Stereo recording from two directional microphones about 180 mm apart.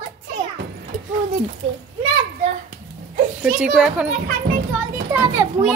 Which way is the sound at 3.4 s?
5° right (ahead or behind).